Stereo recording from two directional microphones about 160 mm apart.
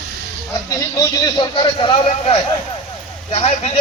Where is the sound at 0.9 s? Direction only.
25° left (ahead or behind).